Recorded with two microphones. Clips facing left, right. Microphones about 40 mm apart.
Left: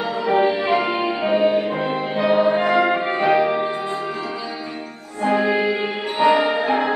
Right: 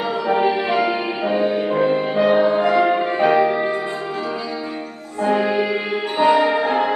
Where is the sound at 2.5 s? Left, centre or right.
Left.